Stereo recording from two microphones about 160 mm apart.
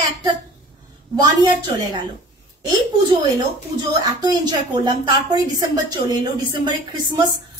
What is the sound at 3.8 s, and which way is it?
Speech, 25° right (ahead or behind).